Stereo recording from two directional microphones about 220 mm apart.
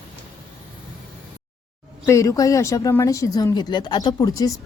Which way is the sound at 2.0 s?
15° left (ahead or behind).